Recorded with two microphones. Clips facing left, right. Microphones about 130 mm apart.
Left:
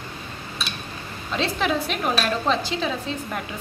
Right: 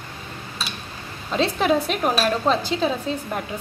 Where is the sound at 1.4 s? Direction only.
40° right (ahead or behind).